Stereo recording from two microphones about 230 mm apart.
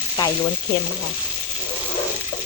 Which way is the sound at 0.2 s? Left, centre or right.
Centre.